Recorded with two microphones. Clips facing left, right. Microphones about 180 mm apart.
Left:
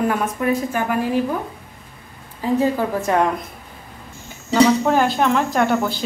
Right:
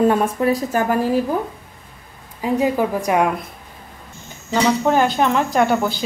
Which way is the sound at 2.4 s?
15° right (ahead or behind).